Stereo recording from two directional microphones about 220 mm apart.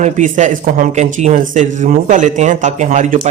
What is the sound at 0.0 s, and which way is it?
Speech, 35° right (ahead or behind).